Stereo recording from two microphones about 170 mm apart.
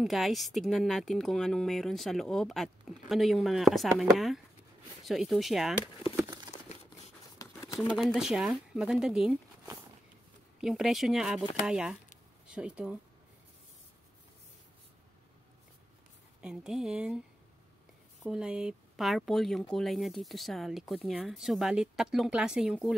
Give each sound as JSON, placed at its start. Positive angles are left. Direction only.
{"t": 0.0, "sound": "speech", "side_deg": 0}
{"t": 6.2, "sound": "crumpling", "side_deg": -25}
{"t": 7.3, "sound": "patter", "side_deg": 20}
{"t": 7.8, "sound": "speech", "side_deg": 5}
{"t": 10.6, "sound": "speech", "side_deg": 0}
{"t": 16.3, "sound": "speech", "side_deg": -5}
{"t": 18.2, "sound": "speech", "side_deg": -5}